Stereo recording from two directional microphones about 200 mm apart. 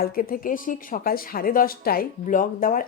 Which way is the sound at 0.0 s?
45° left (ahead or behind).